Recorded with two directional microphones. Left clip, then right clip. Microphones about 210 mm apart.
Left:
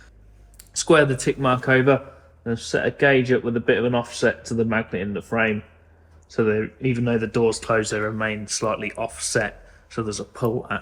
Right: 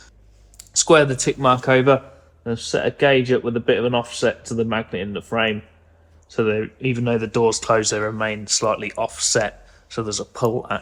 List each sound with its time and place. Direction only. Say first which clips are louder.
0.8 s speech: right 2 dB; 20° right (ahead or behind)
2.6 s speech: right 2 dB; 10° right (ahead or behind)
3.2 s speech: right 1 dB; 20° right (ahead or behind)
8.9 s speech: right 4 dB; centre (ahead or behind)